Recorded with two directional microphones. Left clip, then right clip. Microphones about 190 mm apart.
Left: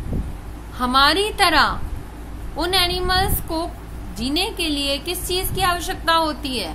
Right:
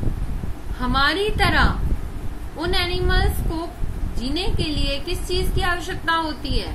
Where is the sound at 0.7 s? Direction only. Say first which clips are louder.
Left 4 dB; 55° left (ahead or behind).